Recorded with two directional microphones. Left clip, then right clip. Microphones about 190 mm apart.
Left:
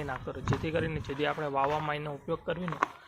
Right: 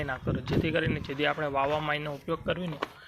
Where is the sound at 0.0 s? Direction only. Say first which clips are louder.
Right 3 dB; 5° right (ahead or behind).